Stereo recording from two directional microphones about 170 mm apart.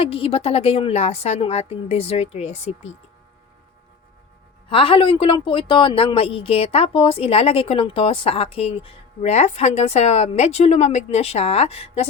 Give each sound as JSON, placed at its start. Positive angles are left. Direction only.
{"t": 0.0, "sound": "a woman's voice", "side_deg": 35}
{"t": 4.7, "sound": "a woman's voice", "side_deg": 30}